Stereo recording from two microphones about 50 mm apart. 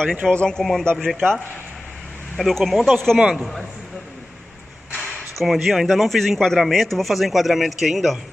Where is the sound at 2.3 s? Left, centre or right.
Centre.